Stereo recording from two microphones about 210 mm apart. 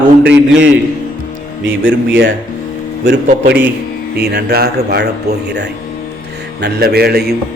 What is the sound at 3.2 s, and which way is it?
Speech, 50° right (ahead or behind).